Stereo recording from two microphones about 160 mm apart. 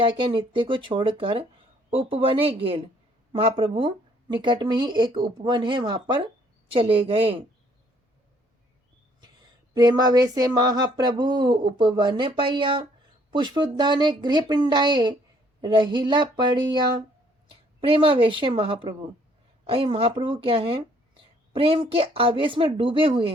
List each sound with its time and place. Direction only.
0.0 s speech: 30° right (ahead or behind)
9.7 s a woman's voice: 25° right (ahead or behind)